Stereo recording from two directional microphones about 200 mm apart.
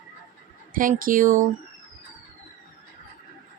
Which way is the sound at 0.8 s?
45° right (ahead or behind).